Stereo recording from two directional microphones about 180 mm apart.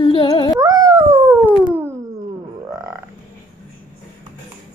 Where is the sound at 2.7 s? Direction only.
15° right (ahead or behind).